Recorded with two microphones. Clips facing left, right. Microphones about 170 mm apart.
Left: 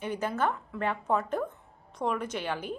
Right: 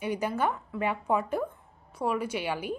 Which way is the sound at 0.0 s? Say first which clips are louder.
Right 1 dB; 10° right (ahead or behind).